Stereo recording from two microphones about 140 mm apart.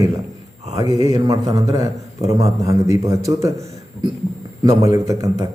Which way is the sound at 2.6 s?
20° right (ahead or behind).